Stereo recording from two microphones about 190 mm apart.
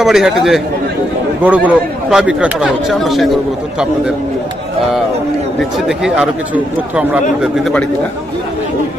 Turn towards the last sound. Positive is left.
turn(degrees=5)  # may be behind; listen again after turning